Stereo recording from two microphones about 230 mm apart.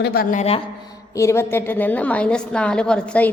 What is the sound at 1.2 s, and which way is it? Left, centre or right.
A woman's voice, centre.